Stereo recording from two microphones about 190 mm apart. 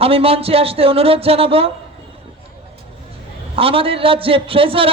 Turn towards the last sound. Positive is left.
turn(degrees=-30)  # may be behind; listen again after turning